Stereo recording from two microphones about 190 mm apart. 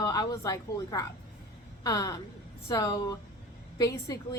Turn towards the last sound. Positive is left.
turn(degrees=20)  # may be behind; listen again after turning